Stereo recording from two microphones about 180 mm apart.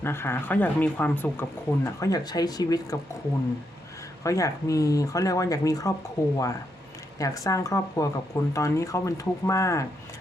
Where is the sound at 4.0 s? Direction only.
20° left (ahead or behind).